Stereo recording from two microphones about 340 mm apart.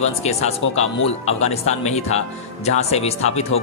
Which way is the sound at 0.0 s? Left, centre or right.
Centre.